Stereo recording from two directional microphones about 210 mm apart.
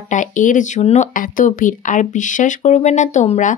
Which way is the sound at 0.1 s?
35° left (ahead or behind).